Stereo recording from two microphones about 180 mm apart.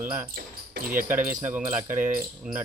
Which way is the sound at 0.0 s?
10° right (ahead or behind).